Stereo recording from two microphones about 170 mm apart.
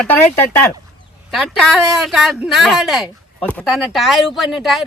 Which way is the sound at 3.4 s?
10° left (ahead or behind).